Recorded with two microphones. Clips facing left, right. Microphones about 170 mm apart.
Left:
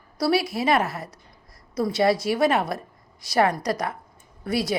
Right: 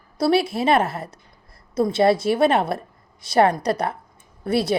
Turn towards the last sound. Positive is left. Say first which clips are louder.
# right 4 dB
turn(degrees=-30)  # may be behind; listen again after turning